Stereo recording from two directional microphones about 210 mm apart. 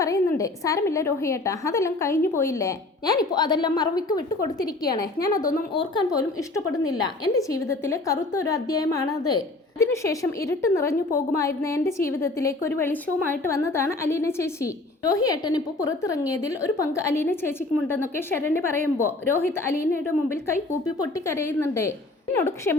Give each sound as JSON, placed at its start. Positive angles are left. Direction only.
{"t": 0.0, "sound": "a woman's voice", "side_deg": 15}
{"t": 5.3, "sound": "a woman's voice", "side_deg": 40}
{"t": 5.7, "sound": "a woman's voice", "side_deg": 25}